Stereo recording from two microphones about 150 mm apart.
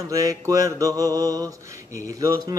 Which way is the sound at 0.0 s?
25° right (ahead or behind).